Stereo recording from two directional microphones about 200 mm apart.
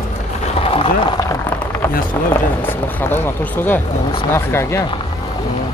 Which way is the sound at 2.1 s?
10° left (ahead or behind).